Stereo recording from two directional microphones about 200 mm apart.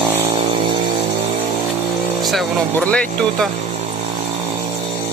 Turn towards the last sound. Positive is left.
turn(degrees=5)  # may be behind; listen again after turning